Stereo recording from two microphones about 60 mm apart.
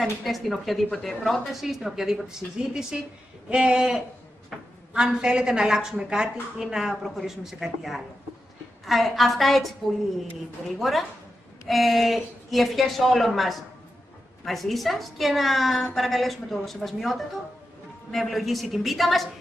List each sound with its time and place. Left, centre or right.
0.0 s a woman's voice: centre